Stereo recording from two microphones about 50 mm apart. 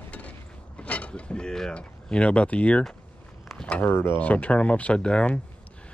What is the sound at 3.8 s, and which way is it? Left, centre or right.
Speech, left.